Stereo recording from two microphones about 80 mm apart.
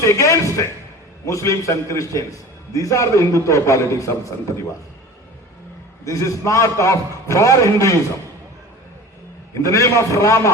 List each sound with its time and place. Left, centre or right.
0.0 s a man's voice: left
6.1 s a man's voice: left
9.6 s a man's voice: left